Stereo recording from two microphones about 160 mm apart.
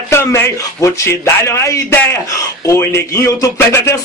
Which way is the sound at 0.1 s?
15° left (ahead or behind).